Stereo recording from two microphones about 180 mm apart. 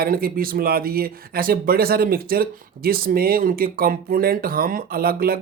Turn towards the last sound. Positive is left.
turn(degrees=-55)  # may be behind; listen again after turning